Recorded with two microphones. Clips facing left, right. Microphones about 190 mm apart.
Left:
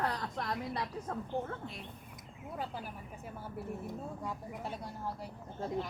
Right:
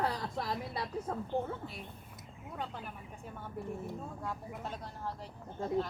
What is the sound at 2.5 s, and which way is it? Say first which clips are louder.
Speech: left 1 dB; 5° left (ahead or behind).